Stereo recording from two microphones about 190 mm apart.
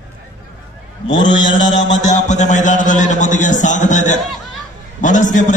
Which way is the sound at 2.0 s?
40° left (ahead or behind).